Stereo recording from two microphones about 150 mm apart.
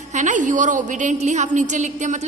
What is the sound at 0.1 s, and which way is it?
A woman's voice, 55° right (ahead or behind).